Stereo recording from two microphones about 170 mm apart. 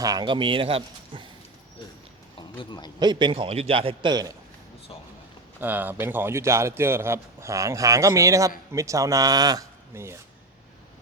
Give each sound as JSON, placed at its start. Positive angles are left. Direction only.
{"t": 0.0, "sound": "a man's voice", "side_deg": -25}
{"t": 2.6, "sound": "speech", "side_deg": 25}
{"t": 3.0, "sound": "a man's voice", "side_deg": -25}
{"t": 5.5, "sound": "a man's voice", "side_deg": -10}